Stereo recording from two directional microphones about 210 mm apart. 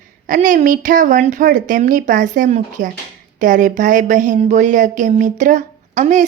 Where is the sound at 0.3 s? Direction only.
40° right (ahead or behind).